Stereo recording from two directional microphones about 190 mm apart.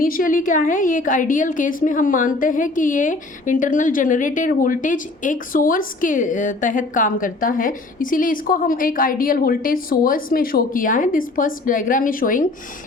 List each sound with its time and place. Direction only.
0.0 s a woman's voice: 50° left (ahead or behind)